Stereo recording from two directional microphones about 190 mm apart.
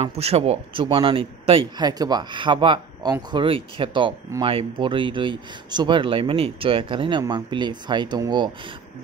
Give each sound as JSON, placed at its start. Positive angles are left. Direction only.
{"t": 0.0, "sound": "speech", "side_deg": -30}